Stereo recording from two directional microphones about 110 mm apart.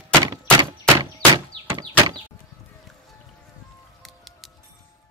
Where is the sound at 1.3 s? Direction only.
40° right (ahead or behind).